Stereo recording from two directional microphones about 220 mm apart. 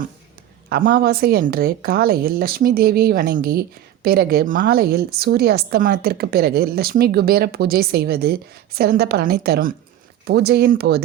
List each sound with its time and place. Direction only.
0.7 s a woman's voice: 40° right (ahead or behind)